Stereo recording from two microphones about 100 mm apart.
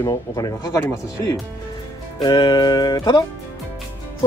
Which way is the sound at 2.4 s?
50° left (ahead or behind).